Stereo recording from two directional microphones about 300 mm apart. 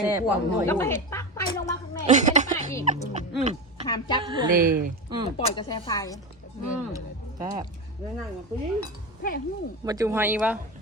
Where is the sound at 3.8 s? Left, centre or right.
Centre.